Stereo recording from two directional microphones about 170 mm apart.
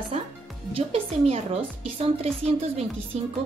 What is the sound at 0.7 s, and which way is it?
Speech, 35° right (ahead or behind).